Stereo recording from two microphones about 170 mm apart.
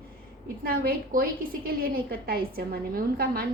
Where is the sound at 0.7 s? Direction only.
60° right (ahead or behind).